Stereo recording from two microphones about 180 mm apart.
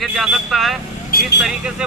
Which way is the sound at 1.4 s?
Centre (ahead or behind).